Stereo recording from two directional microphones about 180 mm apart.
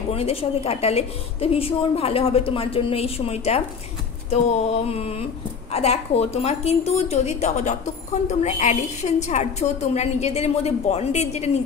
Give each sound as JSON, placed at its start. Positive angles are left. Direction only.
{"t": 0.1, "sound": "a woman's voice", "side_deg": 35}